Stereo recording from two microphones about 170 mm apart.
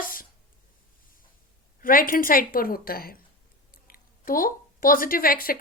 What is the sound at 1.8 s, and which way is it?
A woman's voice, 55° left (ahead or behind).